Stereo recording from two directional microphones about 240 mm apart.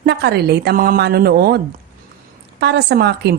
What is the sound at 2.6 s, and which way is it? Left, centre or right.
Speech, right.